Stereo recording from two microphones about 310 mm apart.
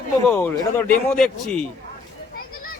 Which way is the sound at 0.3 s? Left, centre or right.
Centre.